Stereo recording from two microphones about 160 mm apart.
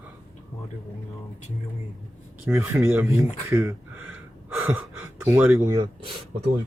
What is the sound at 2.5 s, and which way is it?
Speech, 15° right (ahead or behind).